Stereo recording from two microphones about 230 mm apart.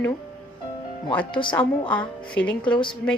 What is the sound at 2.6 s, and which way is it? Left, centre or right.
Speech, left.